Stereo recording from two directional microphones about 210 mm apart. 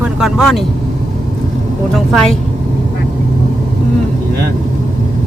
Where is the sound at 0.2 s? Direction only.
Centre (ahead or behind).